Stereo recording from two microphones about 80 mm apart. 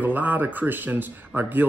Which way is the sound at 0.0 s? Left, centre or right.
Right.